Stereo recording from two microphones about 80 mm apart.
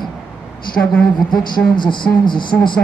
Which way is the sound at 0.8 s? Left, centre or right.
Centre.